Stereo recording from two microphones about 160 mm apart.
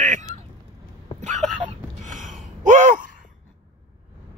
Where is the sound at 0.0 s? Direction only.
50° right (ahead or behind).